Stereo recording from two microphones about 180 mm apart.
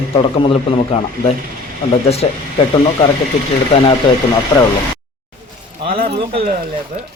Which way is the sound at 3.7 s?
35° left (ahead or behind).